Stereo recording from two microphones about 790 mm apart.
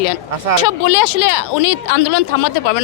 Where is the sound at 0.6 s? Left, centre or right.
Left.